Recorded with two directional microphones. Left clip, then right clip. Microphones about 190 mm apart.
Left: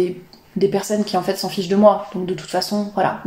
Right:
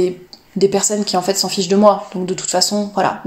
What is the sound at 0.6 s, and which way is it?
A woman's voice, 30° right (ahead or behind).